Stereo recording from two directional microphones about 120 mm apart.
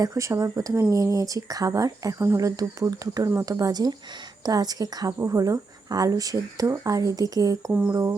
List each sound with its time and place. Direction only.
0.0 s a woman's voice: 25° right (ahead or behind)
7.7 s speech: 10° right (ahead or behind)